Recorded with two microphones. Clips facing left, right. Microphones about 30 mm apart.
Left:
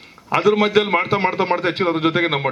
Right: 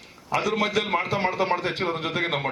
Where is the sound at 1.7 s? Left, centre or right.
Left.